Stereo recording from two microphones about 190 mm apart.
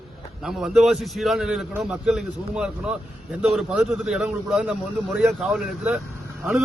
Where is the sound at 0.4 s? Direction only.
Centre (ahead or behind).